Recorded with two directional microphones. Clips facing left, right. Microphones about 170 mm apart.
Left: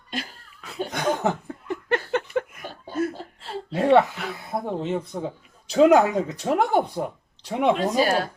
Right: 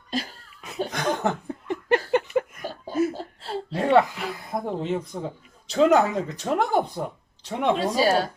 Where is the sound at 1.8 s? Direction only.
15° right (ahead or behind).